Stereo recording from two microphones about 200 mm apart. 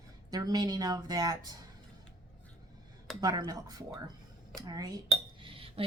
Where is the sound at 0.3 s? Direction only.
20° right (ahead or behind).